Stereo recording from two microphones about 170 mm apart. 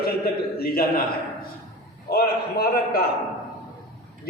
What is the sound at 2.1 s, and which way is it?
Speech, 65° left (ahead or behind).